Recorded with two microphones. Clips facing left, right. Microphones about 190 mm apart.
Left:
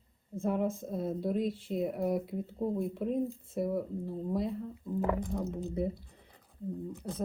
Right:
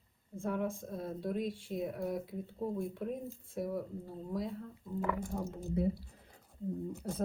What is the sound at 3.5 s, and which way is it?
Speech, centre (ahead or behind).